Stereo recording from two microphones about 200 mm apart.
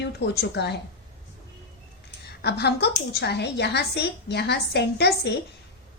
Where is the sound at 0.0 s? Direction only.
55° left (ahead or behind).